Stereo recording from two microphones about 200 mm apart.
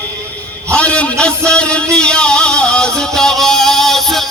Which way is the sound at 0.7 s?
5° left (ahead or behind).